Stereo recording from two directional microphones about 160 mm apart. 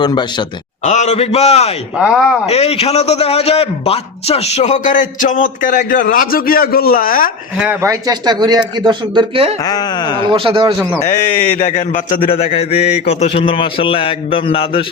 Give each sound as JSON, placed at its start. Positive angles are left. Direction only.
{"t": 0.0, "sound": "speech", "side_deg": 30}
{"t": 0.9, "sound": "a man's voice", "side_deg": 45}
{"t": 2.0, "sound": "speech", "side_deg": -5}
{"t": 2.5, "sound": "a man's voice", "side_deg": 40}
{"t": 7.6, "sound": "speech", "side_deg": -15}
{"t": 9.6, "sound": "speech", "side_deg": 25}
{"t": 10.2, "sound": "speech", "side_deg": -35}
{"t": 12.3, "sound": "a man's voice", "side_deg": 40}